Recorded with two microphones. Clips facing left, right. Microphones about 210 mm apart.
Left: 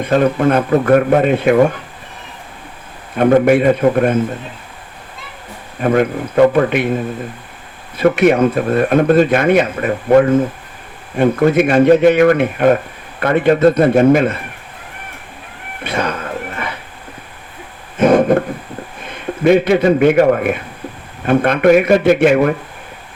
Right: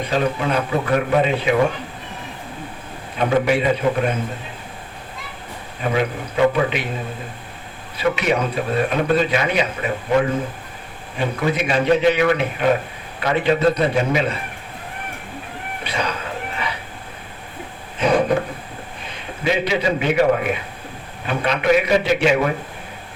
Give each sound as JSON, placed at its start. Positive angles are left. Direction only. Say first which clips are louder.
{"t": 0.0, "sound": "speech", "louder": "left 8 dB", "side_deg": 55}
{"t": 3.2, "sound": "speech", "louder": "left 8 dB", "side_deg": 50}
{"t": 5.8, "sound": "speech", "louder": "left 7 dB", "side_deg": 50}
{"t": 7.9, "sound": "speech", "louder": "left 8 dB", "side_deg": 55}
{"t": 15.8, "sound": "music", "louder": "left 6 dB", "side_deg": 55}
{"t": 17.9, "sound": "a sound", "louder": "left 7 dB", "side_deg": 50}
{"t": 19.0, "sound": "a man's voice", "louder": "left 10 dB", "side_deg": 55}